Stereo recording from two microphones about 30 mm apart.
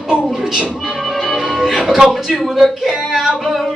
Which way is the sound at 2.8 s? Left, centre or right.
Centre.